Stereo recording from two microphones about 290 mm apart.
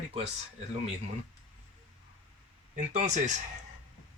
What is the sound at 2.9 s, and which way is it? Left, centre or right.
Speech, right.